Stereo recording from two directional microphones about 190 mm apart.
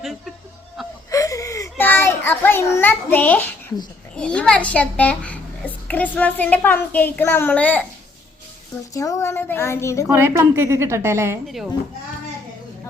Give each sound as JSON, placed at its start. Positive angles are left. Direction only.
{"t": 0.0, "sound": "speech", "side_deg": 0}
{"t": 0.8, "sound": "wheeze", "side_deg": 0}
{"t": 1.1, "sound": "wheeze", "side_deg": 15}
{"t": 1.8, "sound": "a child's voice", "side_deg": 10}
{"t": 8.9, "sound": "a child's voice", "side_deg": 15}
{"t": 10.1, "sound": "a woman's voice", "side_deg": -15}
{"t": 11.4, "sound": "speech", "side_deg": 0}